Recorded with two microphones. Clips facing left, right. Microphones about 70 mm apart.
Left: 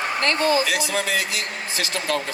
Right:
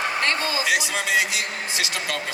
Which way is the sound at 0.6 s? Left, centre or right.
Centre.